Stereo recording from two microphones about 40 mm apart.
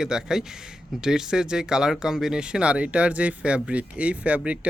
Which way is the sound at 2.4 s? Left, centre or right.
Right.